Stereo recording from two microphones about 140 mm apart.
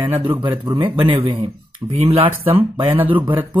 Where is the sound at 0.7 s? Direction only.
35° right (ahead or behind).